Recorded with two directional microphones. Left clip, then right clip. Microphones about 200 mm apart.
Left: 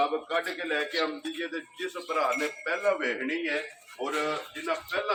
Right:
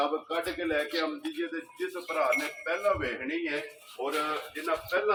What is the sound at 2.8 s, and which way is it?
Speech, centre (ahead or behind).